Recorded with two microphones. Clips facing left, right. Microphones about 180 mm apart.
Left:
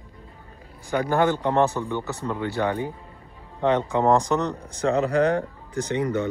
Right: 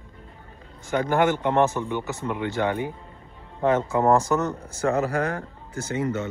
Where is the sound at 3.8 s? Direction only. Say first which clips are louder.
Even; 15° left (ahead or behind).